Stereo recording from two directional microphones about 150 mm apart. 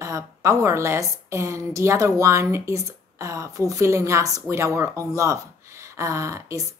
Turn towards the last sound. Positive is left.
turn(degrees=-20)  # may be behind; listen again after turning